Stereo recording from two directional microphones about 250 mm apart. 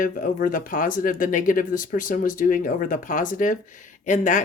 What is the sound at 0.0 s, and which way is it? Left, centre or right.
Speech, left.